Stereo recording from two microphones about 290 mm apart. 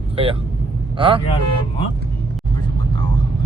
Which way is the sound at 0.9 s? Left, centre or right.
Centre.